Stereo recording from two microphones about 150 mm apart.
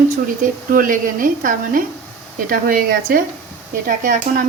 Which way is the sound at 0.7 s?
65° right (ahead or behind).